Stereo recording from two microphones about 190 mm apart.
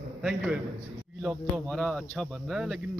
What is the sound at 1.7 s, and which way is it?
Speech, 5° left (ahead or behind).